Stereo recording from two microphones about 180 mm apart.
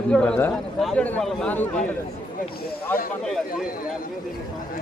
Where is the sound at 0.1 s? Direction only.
5° left (ahead or behind).